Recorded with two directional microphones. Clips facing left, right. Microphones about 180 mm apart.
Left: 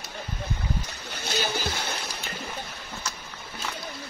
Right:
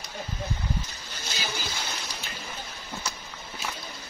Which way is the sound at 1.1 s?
60° left (ahead or behind).